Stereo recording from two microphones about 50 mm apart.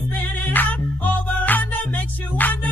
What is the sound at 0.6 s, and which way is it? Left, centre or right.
Music, left.